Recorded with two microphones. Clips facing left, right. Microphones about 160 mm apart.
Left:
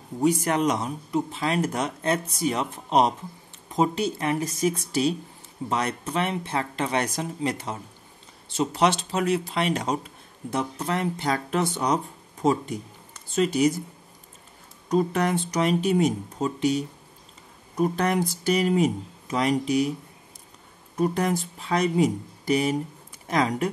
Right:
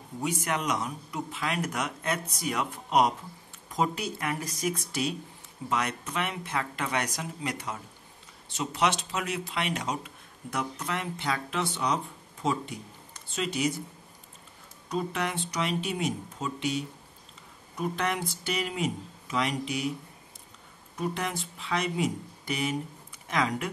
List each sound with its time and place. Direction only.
0.2 s speech: 35° left (ahead or behind)
14.9 s speech: 40° left (ahead or behind)
20.9 s speech: 40° left (ahead or behind)